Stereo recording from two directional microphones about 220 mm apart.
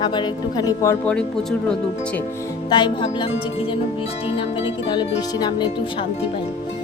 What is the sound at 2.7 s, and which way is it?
Speech, 20° left (ahead or behind).